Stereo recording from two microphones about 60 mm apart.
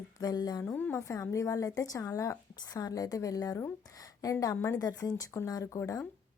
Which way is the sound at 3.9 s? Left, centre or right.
Left.